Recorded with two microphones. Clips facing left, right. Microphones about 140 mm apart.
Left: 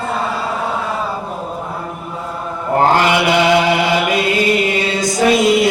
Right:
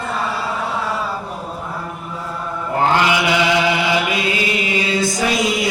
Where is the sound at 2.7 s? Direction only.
45° left (ahead or behind).